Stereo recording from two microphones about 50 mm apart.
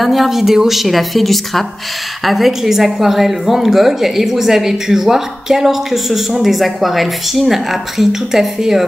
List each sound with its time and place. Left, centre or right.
0.0 s a woman's voice: centre